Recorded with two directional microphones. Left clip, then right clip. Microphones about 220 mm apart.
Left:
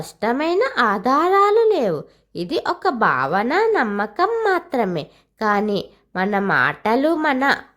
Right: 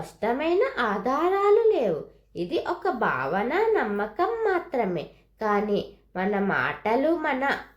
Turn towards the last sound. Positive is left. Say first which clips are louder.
# left 7 dB
turn(degrees=40)  # may be behind; listen again after turning